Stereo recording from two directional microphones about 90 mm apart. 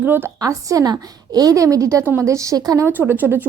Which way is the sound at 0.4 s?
40° right (ahead or behind).